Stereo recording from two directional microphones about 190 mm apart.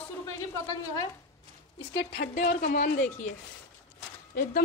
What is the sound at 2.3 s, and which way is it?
Speech, 45° left (ahead or behind).